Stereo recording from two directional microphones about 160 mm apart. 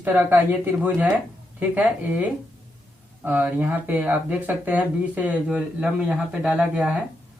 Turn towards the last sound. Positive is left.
turn(degrees=-5)  # may be behind; listen again after turning